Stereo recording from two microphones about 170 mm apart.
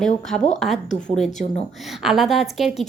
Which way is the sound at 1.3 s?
45° left (ahead or behind).